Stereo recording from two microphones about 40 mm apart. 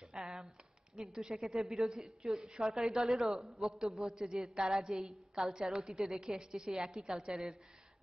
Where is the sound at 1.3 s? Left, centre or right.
Centre.